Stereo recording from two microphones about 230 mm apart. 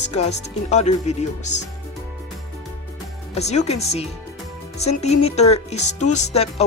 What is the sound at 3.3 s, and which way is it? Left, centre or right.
Speech, left.